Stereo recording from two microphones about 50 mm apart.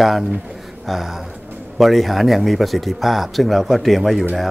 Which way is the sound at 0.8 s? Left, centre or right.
Centre.